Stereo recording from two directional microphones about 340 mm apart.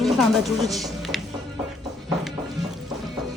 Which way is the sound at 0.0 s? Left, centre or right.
Centre.